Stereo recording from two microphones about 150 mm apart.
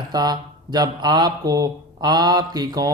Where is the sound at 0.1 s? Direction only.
25° right (ahead or behind).